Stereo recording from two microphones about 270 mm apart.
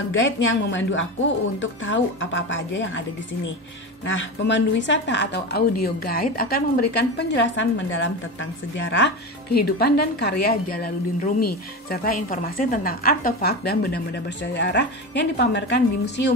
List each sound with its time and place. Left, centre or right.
0.1 s a woman's voice: left
4.0 s a woman's voice: left